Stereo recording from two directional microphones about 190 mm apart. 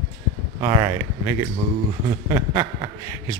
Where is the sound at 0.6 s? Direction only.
25° right (ahead or behind).